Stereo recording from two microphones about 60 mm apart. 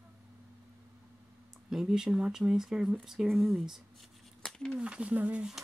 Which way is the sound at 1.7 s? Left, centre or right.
Centre.